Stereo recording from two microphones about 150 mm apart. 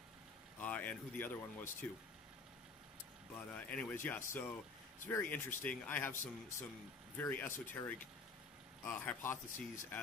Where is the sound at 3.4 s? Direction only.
10° left (ahead or behind).